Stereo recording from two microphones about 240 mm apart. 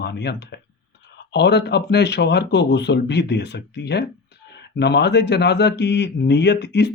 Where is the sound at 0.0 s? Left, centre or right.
Left.